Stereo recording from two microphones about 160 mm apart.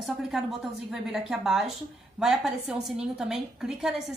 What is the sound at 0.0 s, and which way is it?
A woman's voice, centre (ahead or behind).